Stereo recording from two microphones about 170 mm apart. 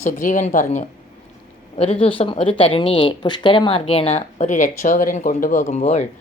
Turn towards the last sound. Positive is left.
turn(degrees=40)  # may be behind; listen again after turning